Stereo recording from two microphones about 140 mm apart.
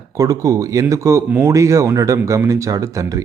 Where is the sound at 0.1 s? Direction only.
25° right (ahead or behind).